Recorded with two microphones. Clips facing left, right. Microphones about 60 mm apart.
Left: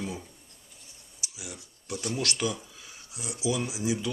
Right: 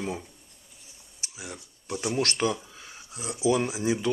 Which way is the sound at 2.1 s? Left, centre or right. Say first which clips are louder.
Right 4 dB; right.